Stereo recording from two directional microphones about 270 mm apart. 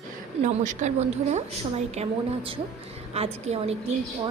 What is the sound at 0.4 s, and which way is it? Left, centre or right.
A woman's voice, right.